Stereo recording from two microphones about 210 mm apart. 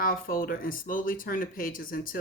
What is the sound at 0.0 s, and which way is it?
Speech, 45° left (ahead or behind).